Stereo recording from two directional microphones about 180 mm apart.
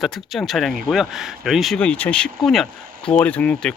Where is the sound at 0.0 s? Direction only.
Centre (ahead or behind).